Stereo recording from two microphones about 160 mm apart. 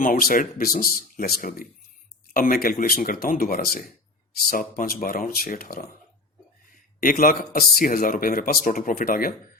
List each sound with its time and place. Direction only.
0.0 s speech: 65° left (ahead or behind)
7.0 s speech: 60° left (ahead or behind)